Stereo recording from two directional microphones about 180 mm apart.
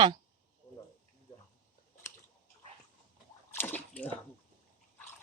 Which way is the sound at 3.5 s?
10° left (ahead or behind).